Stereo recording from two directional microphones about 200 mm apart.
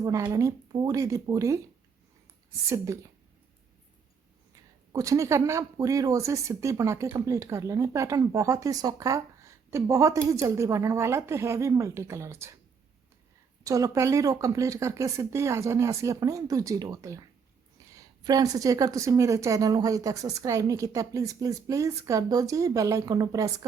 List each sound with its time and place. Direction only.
0.0 s speech: 20° right (ahead or behind)
2.6 s speech: 15° right (ahead or behind)
4.5 s speech: 15° right (ahead or behind)
13.7 s speech: 15° right (ahead or behind)